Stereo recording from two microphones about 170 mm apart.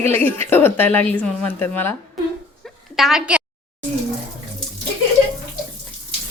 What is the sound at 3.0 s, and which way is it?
Speech, 5° right (ahead or behind).